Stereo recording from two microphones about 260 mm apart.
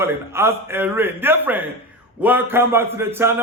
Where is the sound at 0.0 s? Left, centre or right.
Centre.